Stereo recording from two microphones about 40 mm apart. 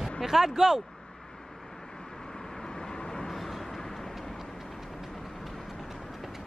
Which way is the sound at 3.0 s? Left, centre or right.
Centre.